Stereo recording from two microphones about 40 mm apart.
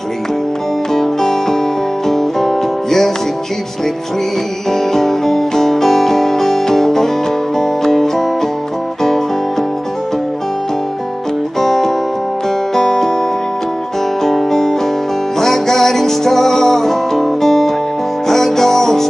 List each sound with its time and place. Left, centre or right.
0.9 s music: centre
4.6 s music: centre
11.6 s music: centre
14.2 s music: centre